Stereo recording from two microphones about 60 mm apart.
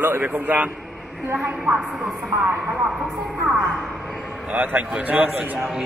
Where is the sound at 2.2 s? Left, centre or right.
Right.